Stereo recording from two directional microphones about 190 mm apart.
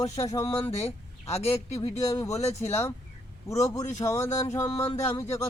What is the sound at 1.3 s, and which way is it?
Speech, 35° left (ahead or behind).